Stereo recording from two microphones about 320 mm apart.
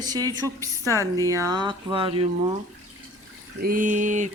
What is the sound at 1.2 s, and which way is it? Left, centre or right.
A woman's voice, centre.